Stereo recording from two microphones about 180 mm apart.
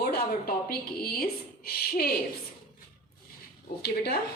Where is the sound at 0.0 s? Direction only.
55° left (ahead or behind).